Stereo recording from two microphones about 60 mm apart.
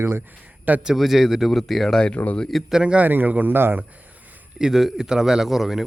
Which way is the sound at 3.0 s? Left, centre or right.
Right.